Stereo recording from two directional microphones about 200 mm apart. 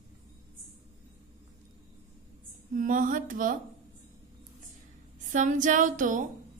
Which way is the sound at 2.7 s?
40° right (ahead or behind).